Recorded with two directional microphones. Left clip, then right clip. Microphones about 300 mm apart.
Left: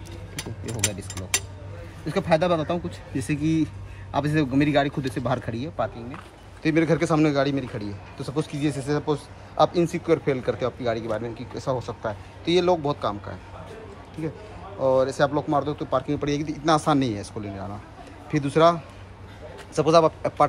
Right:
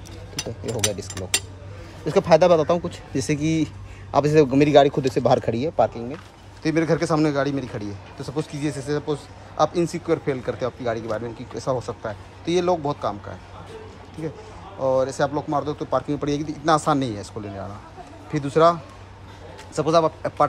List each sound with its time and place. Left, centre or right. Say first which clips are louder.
2.0 s speech: right 6 dB; centre
6.6 s speech: even; centre
14.8 s speech: even; centre